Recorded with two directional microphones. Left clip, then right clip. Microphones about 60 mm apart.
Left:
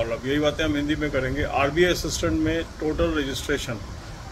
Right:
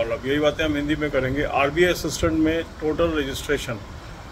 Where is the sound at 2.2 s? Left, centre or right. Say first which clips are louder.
Right 4 dB; centre.